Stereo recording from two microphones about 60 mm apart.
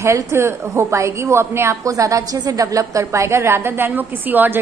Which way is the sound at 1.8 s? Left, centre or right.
Right.